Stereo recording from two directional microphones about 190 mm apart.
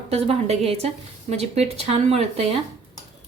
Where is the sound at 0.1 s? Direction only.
30° right (ahead or behind).